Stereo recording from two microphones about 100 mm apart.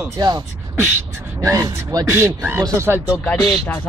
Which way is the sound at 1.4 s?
30° right (ahead or behind).